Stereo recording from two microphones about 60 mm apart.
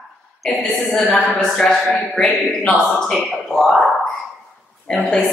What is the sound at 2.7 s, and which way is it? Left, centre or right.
Speech, centre.